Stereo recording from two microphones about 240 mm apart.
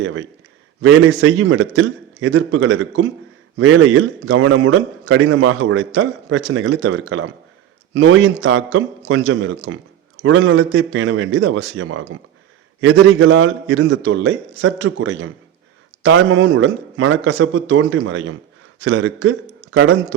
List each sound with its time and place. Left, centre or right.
0.0 s a man's voice: right